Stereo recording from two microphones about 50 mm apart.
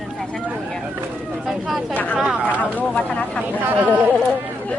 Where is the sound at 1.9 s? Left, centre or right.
Left.